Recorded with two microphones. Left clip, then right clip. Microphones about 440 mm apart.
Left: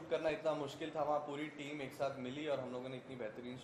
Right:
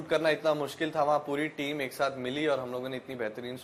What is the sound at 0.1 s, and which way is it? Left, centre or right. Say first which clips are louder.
A man's voice: right 10 dB; right.